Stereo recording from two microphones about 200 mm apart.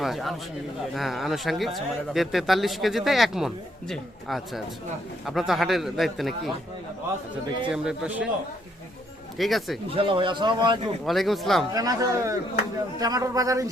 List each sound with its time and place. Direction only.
0.0 s speech: centre (ahead or behind)
7.7 s speech: 5° right (ahead or behind)
9.4 s speech: centre (ahead or behind)
9.9 s a man's voice: 25° right (ahead or behind)
11.0 s speech: centre (ahead or behind)
11.7 s a man's voice: 20° right (ahead or behind)